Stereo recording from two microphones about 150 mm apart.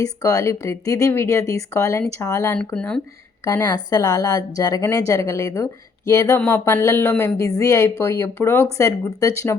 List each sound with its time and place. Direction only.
0.0 s speech: 20° left (ahead or behind)
2.7 s speech: 5° left (ahead or behind)
3.4 s speech: 25° left (ahead or behind)